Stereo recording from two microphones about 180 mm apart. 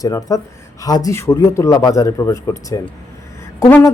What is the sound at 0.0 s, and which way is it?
A woman's voice, 20° left (ahead or behind).